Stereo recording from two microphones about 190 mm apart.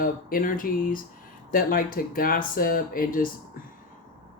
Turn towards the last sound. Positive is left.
turn(degrees=45)  # may be behind; listen again after turning